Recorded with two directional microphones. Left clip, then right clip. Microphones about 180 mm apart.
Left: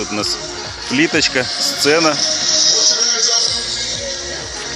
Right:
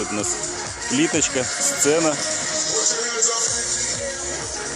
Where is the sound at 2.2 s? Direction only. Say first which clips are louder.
Left 9 dB; 45° right (ahead or behind).